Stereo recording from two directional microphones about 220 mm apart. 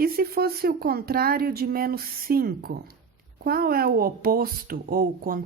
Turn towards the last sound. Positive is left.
turn(degrees=-40)  # may be behind; listen again after turning